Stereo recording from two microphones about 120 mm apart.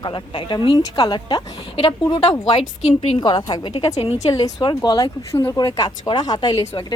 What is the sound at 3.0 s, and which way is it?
Speech, 45° left (ahead or behind).